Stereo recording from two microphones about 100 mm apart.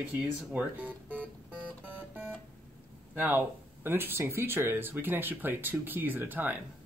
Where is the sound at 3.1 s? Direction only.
20° right (ahead or behind).